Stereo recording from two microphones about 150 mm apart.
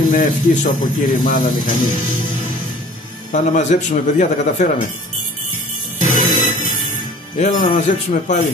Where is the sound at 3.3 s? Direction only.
50° left (ahead or behind).